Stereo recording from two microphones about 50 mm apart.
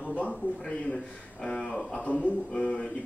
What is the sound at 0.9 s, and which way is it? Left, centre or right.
Speech, centre.